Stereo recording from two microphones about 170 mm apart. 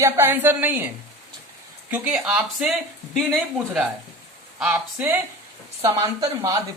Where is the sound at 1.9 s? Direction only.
10° right (ahead or behind).